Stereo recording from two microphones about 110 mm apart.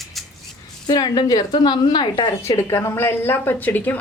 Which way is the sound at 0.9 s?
35° left (ahead or behind).